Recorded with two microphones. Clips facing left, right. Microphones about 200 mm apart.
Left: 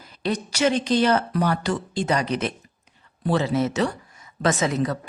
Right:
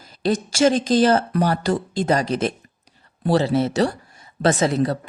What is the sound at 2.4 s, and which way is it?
Speech, 35° right (ahead or behind).